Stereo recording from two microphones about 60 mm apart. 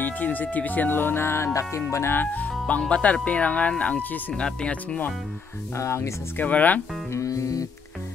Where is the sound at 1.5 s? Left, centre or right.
Left.